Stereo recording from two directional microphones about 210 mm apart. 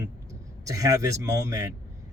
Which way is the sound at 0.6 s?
15° right (ahead or behind).